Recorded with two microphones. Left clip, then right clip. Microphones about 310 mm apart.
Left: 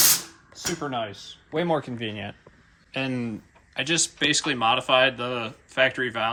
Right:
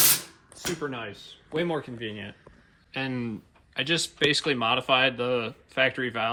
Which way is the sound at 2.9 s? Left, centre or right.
Centre.